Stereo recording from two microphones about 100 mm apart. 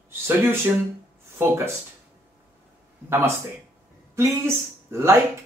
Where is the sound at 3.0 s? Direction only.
25° right (ahead or behind).